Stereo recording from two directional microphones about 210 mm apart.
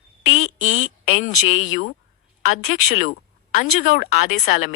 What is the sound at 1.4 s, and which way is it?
Speech, 70° left (ahead or behind).